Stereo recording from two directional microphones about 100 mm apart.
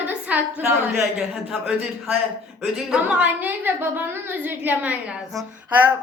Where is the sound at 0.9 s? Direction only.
5° right (ahead or behind).